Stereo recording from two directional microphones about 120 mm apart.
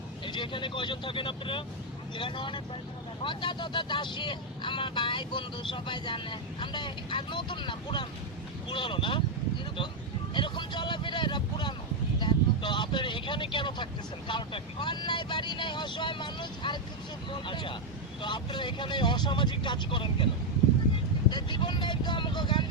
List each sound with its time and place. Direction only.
0.3 s speech: 40° left (ahead or behind)
10.3 s speech: 40° left (ahead or behind)
12.2 s vehicle: 40° left (ahead or behind)
14.3 s speech: 40° left (ahead or behind)
21.2 s speech: 40° left (ahead or behind)